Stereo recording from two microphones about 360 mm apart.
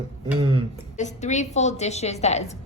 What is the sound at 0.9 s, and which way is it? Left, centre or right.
A woman's voice, centre.